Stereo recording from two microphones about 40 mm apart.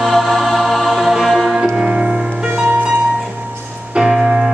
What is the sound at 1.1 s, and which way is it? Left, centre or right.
Music, centre.